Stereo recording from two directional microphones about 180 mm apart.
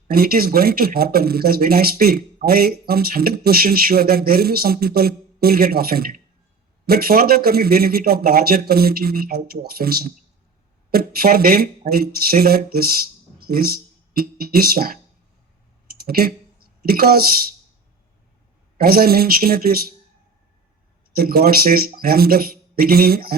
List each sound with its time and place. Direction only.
0.1 s speech: 55° right (ahead or behind)
16.0 s speech: 55° right (ahead or behind)
18.8 s speech: 55° right (ahead or behind)
21.2 s speech: 55° right (ahead or behind)